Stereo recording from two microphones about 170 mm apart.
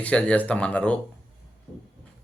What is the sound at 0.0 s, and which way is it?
Speech, 5° left (ahead or behind).